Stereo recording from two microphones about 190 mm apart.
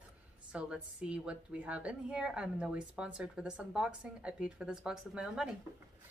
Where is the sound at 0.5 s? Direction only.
5° right (ahead or behind).